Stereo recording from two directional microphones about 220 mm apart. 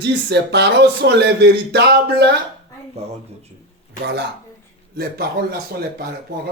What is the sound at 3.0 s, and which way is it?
Speech, 30° right (ahead or behind).